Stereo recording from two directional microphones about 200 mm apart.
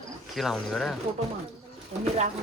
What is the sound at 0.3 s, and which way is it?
Speech, centre (ahead or behind).